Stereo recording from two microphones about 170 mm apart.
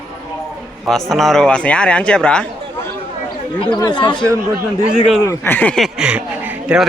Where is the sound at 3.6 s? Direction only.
25° left (ahead or behind).